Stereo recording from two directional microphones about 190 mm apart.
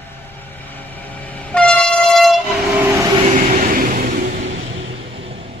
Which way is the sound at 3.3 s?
45° right (ahead or behind).